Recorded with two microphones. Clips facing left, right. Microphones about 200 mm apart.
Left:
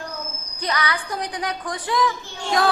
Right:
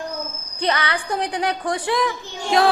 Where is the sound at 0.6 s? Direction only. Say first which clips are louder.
Right 3 dB; 25° right (ahead or behind).